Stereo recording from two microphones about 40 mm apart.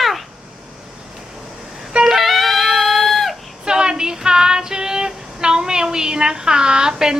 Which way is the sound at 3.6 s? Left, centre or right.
Centre.